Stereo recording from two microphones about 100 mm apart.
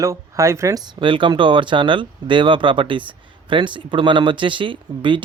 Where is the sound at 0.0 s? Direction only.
30° right (ahead or behind).